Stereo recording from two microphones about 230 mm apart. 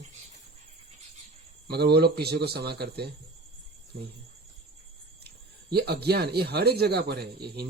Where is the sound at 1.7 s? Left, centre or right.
Right.